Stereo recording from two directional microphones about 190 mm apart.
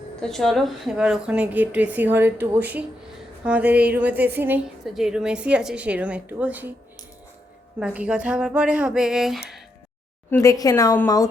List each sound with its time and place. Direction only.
0.2 s a woman's voice: centre (ahead or behind)
7.8 s speech: 5° right (ahead or behind)
10.2 s speech: 15° left (ahead or behind)